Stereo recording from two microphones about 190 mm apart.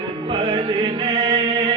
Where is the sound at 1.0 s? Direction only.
25° right (ahead or behind).